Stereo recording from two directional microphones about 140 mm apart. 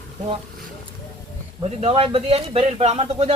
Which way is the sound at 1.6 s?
50° right (ahead or behind).